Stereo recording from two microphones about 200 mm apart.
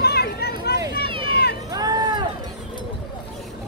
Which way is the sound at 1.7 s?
20° right (ahead or behind).